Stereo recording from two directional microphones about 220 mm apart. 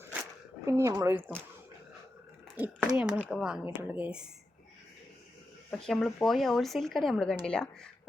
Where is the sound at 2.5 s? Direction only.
10° right (ahead or behind).